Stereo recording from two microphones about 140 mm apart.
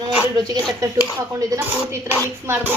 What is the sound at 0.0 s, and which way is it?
A woman's voice, 25° right (ahead or behind).